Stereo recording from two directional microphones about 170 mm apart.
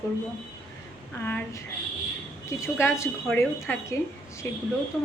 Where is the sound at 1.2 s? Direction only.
15° left (ahead or behind).